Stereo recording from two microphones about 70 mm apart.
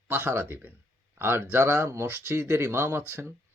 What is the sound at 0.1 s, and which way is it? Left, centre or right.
Speech, right.